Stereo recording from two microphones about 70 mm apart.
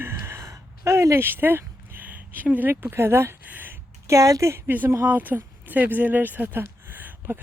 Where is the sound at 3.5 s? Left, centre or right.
Right.